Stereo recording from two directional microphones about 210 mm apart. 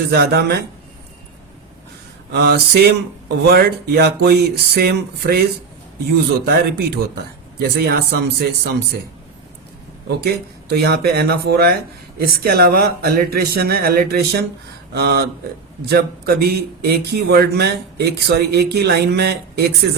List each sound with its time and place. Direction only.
0.1 s speech: 50° right (ahead or behind)
2.3 s speech: 50° right (ahead or behind)
10.1 s speech: 50° right (ahead or behind)